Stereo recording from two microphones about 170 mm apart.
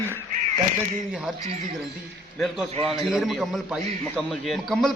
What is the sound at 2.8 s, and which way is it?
A man's voice, centre (ahead or behind).